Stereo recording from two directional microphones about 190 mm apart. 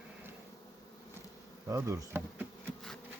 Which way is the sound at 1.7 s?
15° right (ahead or behind).